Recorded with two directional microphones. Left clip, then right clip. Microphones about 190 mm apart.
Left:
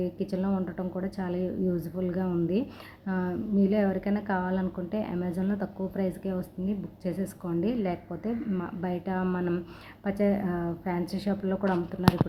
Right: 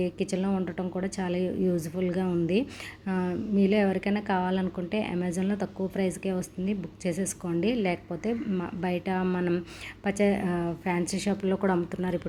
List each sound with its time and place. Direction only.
0.0 s a woman's voice: 15° right (ahead or behind)